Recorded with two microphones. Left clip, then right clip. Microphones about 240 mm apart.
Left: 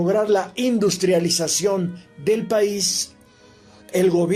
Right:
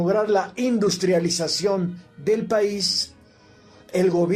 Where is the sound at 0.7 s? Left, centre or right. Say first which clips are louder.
Left 2 dB; left.